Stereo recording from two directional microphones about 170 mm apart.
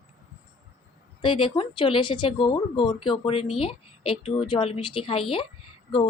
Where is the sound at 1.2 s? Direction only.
30° left (ahead or behind).